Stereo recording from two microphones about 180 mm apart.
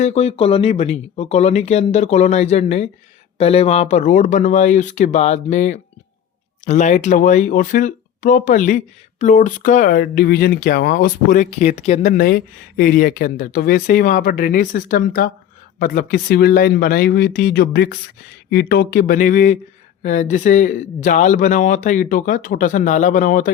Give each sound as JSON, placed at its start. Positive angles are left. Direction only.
{"t": 0.0, "sound": "speech", "side_deg": 35}
{"t": 12.0, "sound": "speech", "side_deg": 55}